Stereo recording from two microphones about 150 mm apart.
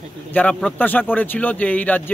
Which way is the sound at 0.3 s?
10° left (ahead or behind).